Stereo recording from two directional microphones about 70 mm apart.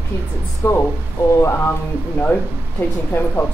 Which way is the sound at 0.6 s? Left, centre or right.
Left.